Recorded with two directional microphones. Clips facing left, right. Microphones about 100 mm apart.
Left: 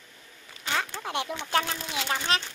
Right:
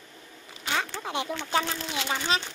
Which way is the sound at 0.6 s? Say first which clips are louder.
Even; 5° right (ahead or behind).